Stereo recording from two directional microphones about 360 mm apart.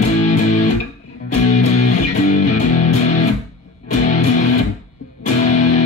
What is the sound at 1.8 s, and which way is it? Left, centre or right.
Music, centre.